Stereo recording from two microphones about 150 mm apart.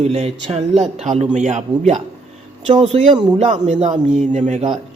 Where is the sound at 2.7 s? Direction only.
35° right (ahead or behind).